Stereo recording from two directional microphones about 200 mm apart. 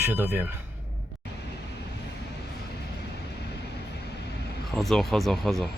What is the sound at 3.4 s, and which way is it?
Vehicle, 55° left (ahead or behind).